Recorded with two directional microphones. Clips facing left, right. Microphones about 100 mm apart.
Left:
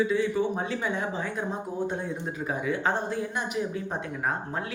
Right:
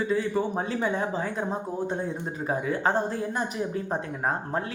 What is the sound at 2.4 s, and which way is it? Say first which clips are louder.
Speech: right 2 dB; 40° right (ahead or behind).